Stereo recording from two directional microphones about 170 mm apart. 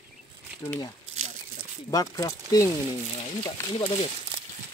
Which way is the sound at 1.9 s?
20° left (ahead or behind).